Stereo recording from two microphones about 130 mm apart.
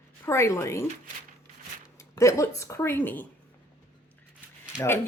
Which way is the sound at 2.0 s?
25° left (ahead or behind).